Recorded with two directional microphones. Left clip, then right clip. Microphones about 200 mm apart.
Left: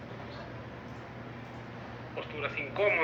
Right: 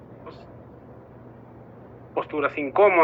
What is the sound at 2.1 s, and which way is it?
Speech, 30° right (ahead or behind).